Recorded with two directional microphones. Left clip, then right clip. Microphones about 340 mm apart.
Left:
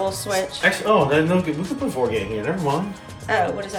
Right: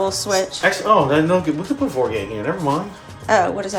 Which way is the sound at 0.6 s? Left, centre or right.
Right.